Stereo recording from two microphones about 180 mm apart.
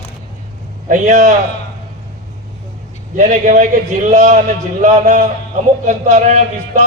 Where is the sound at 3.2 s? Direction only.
40° right (ahead or behind).